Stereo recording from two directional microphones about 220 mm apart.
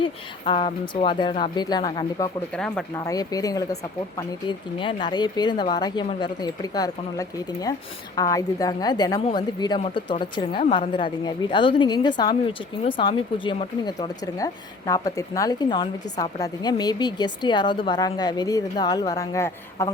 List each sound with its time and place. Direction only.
0.0 s speech: 25° left (ahead or behind)
2.5 s speech: 5° left (ahead or behind)
3.0 s a woman's voice: 15° left (ahead or behind)